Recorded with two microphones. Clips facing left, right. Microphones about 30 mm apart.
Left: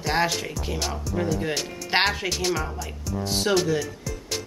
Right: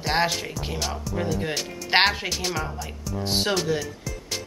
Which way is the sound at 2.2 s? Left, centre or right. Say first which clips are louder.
Left 2 dB; centre.